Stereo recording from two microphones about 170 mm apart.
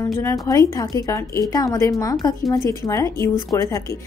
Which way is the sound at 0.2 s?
15° left (ahead or behind).